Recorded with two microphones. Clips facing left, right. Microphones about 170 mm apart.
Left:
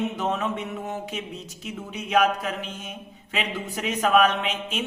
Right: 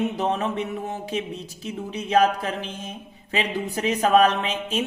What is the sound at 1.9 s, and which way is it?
Speech, 35° right (ahead or behind).